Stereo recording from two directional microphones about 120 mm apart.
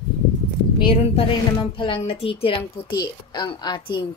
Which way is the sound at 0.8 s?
50° left (ahead or behind).